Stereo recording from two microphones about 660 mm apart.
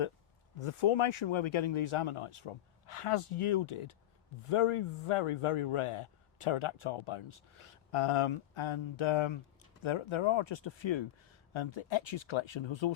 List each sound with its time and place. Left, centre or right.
0.6 s speech: left